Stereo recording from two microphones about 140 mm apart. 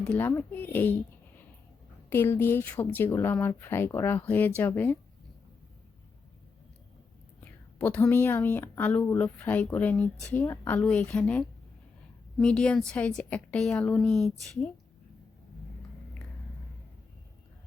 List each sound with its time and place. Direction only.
0.0 s speech: 10° left (ahead or behind)
2.0 s speech: 15° left (ahead or behind)
7.4 s a woman's voice: 10° left (ahead or behind)